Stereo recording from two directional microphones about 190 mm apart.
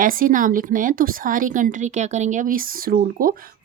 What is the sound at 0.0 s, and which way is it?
A woman's voice, 45° right (ahead or behind).